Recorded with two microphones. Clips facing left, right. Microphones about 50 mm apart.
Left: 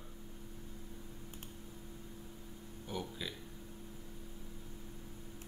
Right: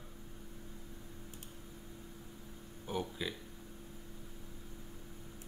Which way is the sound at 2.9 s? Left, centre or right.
Centre.